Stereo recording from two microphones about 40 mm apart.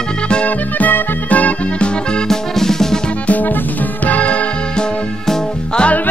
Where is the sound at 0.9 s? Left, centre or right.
Left.